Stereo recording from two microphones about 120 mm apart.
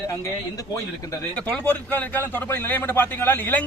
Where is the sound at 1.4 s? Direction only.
10° left (ahead or behind).